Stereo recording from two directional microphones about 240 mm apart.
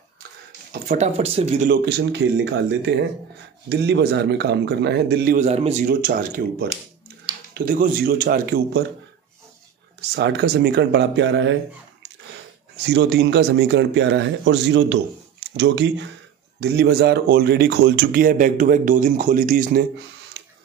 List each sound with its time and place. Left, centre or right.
0.8 s speech: right
2.0 s speech: right
5.4 s speech: right
10.1 s speech: right
12.8 s speech: right
20.4 s a sound: right